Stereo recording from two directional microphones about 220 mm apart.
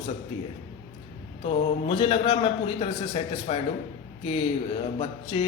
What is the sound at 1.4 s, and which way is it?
A man's voice, 25° left (ahead or behind).